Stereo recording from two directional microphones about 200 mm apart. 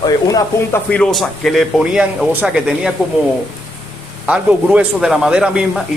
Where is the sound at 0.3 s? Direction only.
15° left (ahead or behind).